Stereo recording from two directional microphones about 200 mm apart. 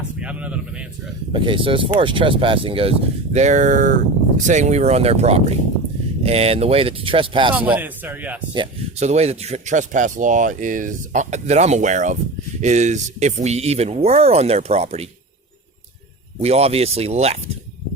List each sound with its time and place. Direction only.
0.2 s speech: 5° right (ahead or behind)
1.3 s speech: 25° right (ahead or behind)
7.8 s speech: 10° right (ahead or behind)
8.5 s speech: 35° right (ahead or behind)
16.4 s speech: 30° right (ahead or behind)